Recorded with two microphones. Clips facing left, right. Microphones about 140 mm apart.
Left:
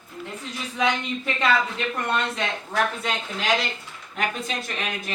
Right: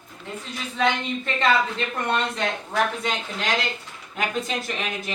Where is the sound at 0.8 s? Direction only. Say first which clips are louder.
Right 1 dB; 10° left (ahead or behind).